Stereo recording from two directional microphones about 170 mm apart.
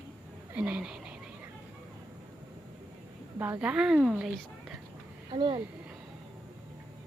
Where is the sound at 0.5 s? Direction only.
5° right (ahead or behind).